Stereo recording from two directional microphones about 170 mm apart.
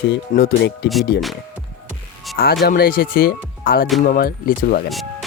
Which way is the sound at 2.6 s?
60° left (ahead or behind).